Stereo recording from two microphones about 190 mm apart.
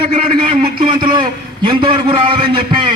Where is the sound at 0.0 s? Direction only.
30° right (ahead or behind).